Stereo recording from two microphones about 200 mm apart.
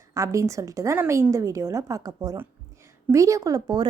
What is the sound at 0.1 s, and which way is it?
Speech, 15° right (ahead or behind).